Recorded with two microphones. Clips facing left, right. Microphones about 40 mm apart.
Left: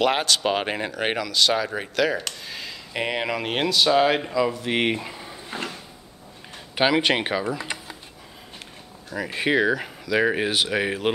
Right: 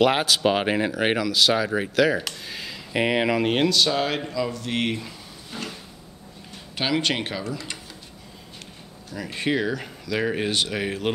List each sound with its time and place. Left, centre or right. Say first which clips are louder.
0.0 s speech: right 2 dB; centre; by 5.7 s left
6.7 s speech: left 4 dB; centre
9.1 s speech: left 3 dB; centre